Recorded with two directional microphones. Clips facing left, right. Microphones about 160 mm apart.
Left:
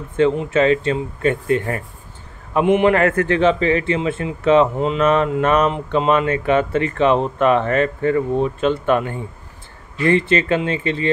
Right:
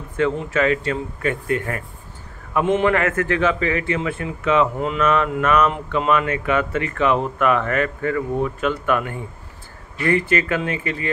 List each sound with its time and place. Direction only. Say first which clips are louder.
0.2 s speech: left 4 dB; 25° left (ahead or behind)
2.9 s speech: left 4 dB; 30° left (ahead or behind)